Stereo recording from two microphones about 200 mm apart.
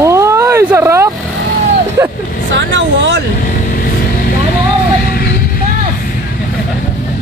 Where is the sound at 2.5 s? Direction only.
65° right (ahead or behind).